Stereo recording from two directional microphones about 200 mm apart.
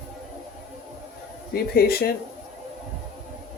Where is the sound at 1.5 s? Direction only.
50° left (ahead or behind).